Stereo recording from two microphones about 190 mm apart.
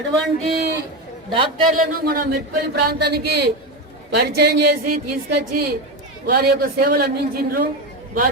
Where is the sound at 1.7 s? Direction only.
50° right (ahead or behind).